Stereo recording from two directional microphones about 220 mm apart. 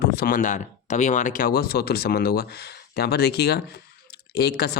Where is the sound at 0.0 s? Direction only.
40° left (ahead or behind).